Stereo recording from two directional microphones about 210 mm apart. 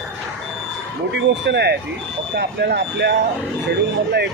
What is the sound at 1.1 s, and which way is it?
Speech, 55° right (ahead or behind).